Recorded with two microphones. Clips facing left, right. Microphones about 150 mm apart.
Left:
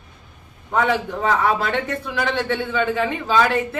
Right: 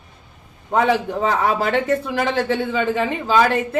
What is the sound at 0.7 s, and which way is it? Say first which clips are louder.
A man's voice: right 3 dB; 30° right (ahead or behind).